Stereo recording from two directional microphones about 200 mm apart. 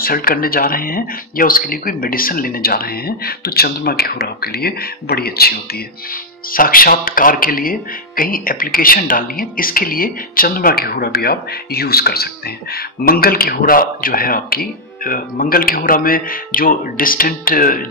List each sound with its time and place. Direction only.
0.0 s speech: 45° left (ahead or behind)